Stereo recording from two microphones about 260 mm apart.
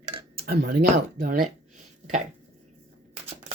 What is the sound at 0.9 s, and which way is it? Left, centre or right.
Speech, right.